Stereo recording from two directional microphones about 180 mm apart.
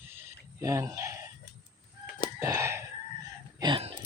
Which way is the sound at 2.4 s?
15° right (ahead or behind).